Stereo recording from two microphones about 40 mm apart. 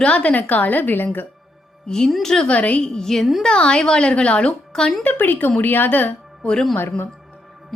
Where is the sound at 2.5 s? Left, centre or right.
Left.